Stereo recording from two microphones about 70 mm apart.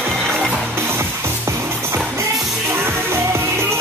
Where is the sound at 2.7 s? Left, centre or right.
Right.